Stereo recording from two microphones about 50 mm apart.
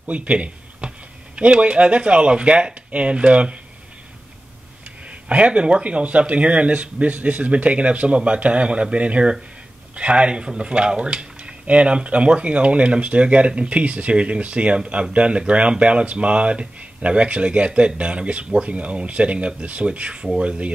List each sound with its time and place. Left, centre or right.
0.0 s speech: right
5.3 s speech: right